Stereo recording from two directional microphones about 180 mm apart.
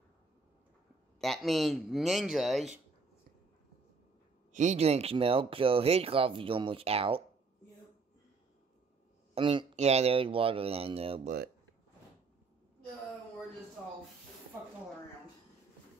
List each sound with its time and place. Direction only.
1.2 s speech: centre (ahead or behind)
4.5 s speech: 40° right (ahead or behind)
9.3 s speech: 30° right (ahead or behind)
11.2 s speech: 60° right (ahead or behind)